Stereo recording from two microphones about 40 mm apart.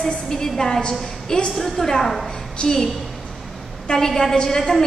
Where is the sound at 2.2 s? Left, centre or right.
Centre.